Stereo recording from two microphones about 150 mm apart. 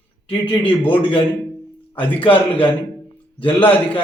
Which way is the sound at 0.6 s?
10° left (ahead or behind).